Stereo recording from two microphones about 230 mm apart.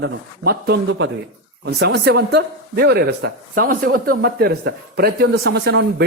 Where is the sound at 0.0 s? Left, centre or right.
Right.